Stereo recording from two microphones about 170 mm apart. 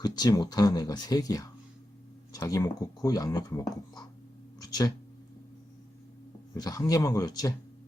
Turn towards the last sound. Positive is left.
turn(degrees=20)  # may be behind; listen again after turning